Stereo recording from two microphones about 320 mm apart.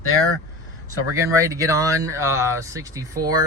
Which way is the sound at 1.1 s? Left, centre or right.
Centre.